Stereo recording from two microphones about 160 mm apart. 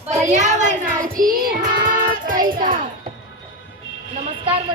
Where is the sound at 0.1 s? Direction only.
45° right (ahead or behind).